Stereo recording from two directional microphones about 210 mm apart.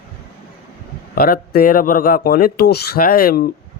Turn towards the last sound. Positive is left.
turn(degrees=45)  # may be behind; listen again after turning